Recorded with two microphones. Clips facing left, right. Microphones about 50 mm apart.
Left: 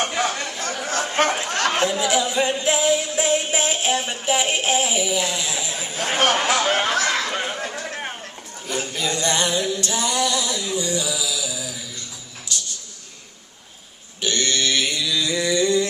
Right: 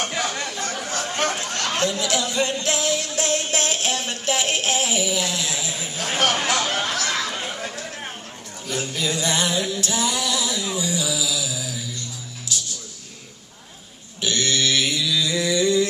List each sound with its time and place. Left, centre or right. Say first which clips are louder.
0.0 s a sound: left 3 dB; centre
1.2 s speech: left 4 dB; left
1.7 s music: left 2 dB; centre
6.3 s speech: left 3 dB; centre
6.7 s speech: left 4 dB; left
7.2 s chatter: left 3 dB; left
7.5 s a sound: left 3 dB; centre
12.5 s music: even; centre
14.2 s mantra: even; centre